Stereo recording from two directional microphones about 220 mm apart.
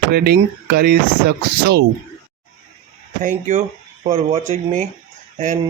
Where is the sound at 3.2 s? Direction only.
35° right (ahead or behind).